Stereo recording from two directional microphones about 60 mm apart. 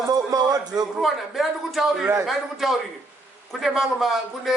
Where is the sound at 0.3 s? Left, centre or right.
Right.